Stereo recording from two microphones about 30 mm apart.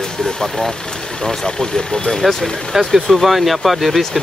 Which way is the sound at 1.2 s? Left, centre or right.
Left.